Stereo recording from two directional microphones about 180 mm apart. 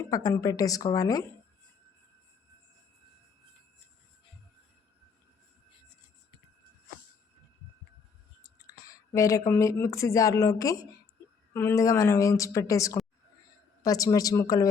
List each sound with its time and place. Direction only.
0.0 s speech: 20° left (ahead or behind)
8.4 s a woman's voice: 20° left (ahead or behind)